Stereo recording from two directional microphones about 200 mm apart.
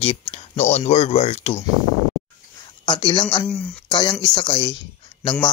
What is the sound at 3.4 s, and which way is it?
Speech, 5° left (ahead or behind).